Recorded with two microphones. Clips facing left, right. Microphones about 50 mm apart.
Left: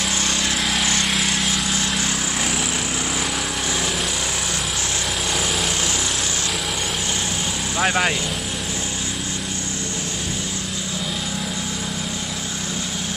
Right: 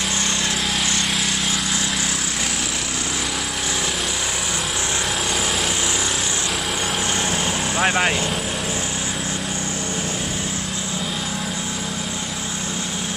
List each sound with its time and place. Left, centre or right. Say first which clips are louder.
7.7 s speech: even; centre